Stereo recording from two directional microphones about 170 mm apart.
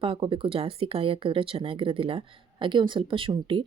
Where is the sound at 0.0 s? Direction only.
30° right (ahead or behind).